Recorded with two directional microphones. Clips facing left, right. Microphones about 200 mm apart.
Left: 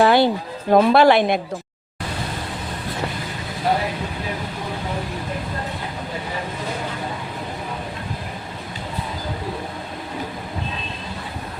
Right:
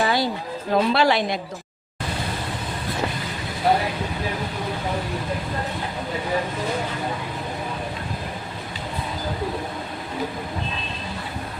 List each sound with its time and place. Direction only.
0.0 s music: 60° left (ahead or behind)
0.7 s speech: 50° left (ahead or behind)